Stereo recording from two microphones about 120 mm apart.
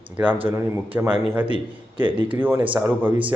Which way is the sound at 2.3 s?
20° right (ahead or behind).